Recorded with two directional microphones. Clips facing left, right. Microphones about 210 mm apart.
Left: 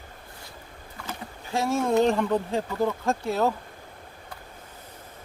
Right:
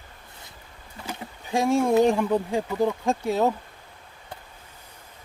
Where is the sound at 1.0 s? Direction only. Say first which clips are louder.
Right 2 dB; 15° right (ahead or behind).